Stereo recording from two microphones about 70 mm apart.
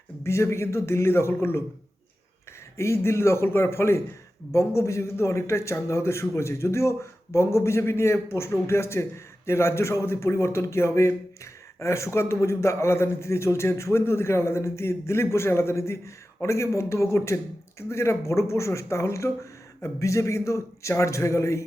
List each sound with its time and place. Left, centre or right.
0.2 s a man's voice: left
2.7 s a man's voice: left